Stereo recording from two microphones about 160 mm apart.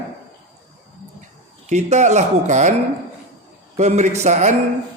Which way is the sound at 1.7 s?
45° right (ahead or behind).